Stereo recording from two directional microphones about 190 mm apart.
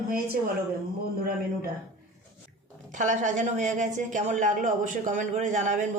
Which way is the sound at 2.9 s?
40° right (ahead or behind).